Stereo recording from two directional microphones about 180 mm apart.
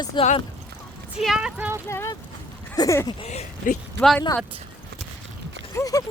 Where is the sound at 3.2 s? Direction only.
35° left (ahead or behind).